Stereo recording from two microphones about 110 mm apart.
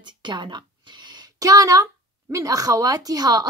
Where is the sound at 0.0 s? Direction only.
45° right (ahead or behind).